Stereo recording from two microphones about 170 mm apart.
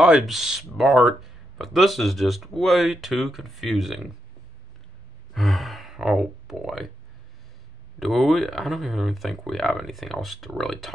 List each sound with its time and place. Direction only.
0.0 s speech: 5° right (ahead or behind)
5.3 s a sound: centre (ahead or behind)
8.0 s speech: centre (ahead or behind)